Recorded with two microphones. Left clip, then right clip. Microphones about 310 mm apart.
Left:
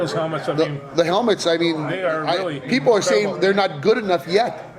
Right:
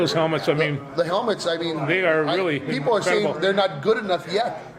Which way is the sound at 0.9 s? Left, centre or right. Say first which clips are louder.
Left 5 dB; left.